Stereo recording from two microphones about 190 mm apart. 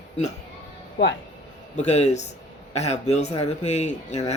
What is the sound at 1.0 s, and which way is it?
Speech, 65° left (ahead or behind).